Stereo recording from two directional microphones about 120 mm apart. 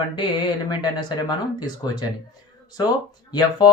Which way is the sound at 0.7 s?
35° left (ahead or behind).